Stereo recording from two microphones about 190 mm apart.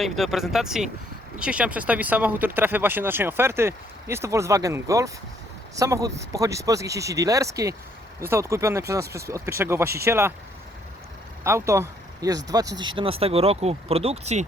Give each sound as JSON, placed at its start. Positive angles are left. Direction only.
{"t": 0.0, "sound": "speech", "side_deg": 0}
{"t": 11.4, "sound": "speech", "side_deg": -15}
{"t": 13.0, "sound": "speech", "side_deg": -30}